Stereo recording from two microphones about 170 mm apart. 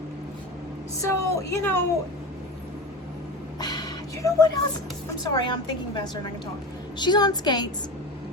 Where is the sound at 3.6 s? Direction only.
25° left (ahead or behind).